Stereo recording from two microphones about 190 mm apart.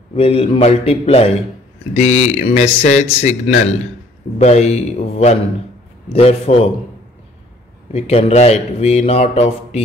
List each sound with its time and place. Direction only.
0.1 s a man's voice: 30° left (ahead or behind)
4.4 s a man's voice: 35° left (ahead or behind)
7.9 s a man's voice: 35° left (ahead or behind)